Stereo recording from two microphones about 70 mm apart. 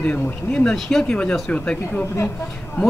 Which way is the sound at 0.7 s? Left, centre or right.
Centre.